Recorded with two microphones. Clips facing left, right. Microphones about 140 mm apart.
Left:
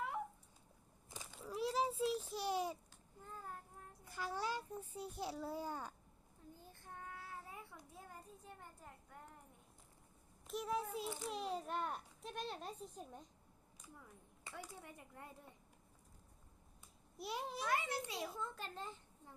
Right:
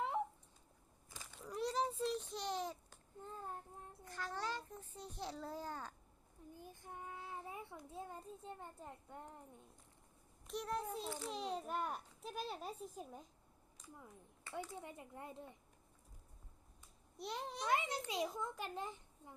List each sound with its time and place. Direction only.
1.1 s a sound: 15° left (ahead or behind)
1.4 s a sound: 5° left (ahead or behind)
3.2 s child singing: 25° right (ahead or behind)
4.0 s a sound: 10° left (ahead or behind)
6.5 s child singing: 15° right (ahead or behind)
10.4 s a child's voice: centre (ahead or behind)
14.7 s speech: 20° right (ahead or behind)
17.2 s a child's voice: 5° left (ahead or behind)
17.7 s a child's voice: 20° right (ahead or behind)